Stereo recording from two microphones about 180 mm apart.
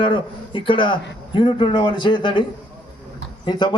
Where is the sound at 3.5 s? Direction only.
25° left (ahead or behind).